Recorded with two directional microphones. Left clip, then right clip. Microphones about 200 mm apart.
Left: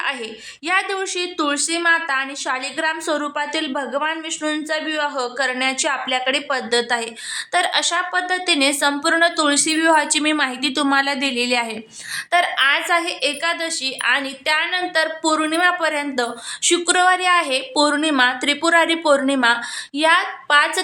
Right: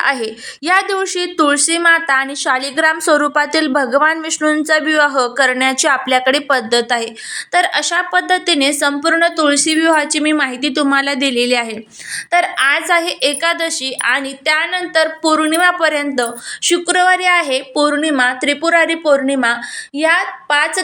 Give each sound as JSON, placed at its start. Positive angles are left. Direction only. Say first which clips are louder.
{"t": 0.0, "sound": "a woman's voice", "louder": "right 8 dB", "side_deg": -20}